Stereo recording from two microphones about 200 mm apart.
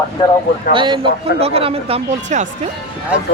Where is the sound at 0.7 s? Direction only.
25° right (ahead or behind).